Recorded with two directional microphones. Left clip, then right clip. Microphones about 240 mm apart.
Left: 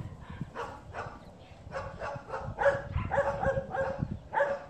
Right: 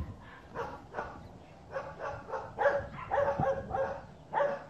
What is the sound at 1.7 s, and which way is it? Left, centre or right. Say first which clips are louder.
Dog: left 1 dB; right.